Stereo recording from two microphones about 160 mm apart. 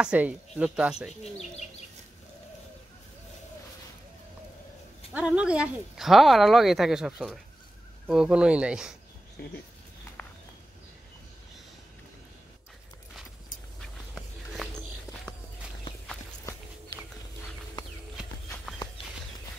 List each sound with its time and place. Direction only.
0.0 s speech: 5° right (ahead or behind)
5.1 s speech: 5° right (ahead or behind)
9.4 s speech: 75° left (ahead or behind)
13.7 s a sound: centre (ahead or behind)